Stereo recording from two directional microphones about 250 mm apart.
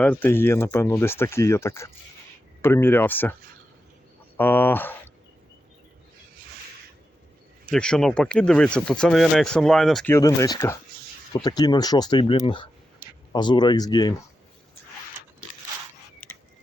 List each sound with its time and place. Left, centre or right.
0.0 s speech: centre
4.4 s speech: centre
7.6 s speech: centre
16.2 s a sound: centre